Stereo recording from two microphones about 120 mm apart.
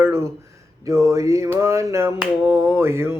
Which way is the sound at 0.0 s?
20° right (ahead or behind).